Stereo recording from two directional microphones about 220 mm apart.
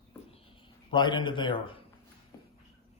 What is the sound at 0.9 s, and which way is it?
Speech, 20° left (ahead or behind).